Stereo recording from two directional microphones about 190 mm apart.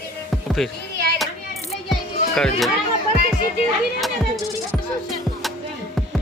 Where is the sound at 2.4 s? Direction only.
Centre (ahead or behind).